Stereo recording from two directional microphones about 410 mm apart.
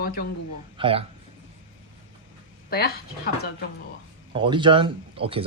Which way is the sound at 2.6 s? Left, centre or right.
Left.